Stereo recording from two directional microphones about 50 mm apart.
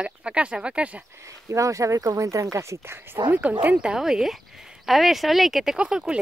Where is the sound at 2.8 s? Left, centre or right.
Right.